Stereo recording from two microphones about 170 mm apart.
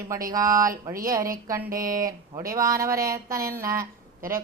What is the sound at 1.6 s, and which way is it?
Speech, 55° right (ahead or behind).